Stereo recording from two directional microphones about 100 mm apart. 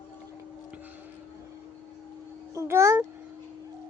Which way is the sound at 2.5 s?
30° right (ahead or behind).